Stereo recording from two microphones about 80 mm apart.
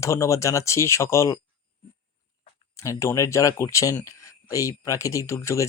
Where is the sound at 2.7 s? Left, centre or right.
Left.